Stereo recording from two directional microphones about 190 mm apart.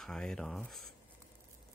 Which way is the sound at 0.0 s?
Centre (ahead or behind).